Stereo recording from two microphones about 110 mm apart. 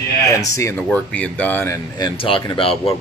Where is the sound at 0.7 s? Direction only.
10° left (ahead or behind).